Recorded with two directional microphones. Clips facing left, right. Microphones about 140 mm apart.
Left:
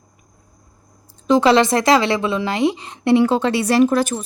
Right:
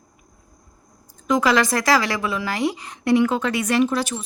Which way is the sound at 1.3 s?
30° left (ahead or behind).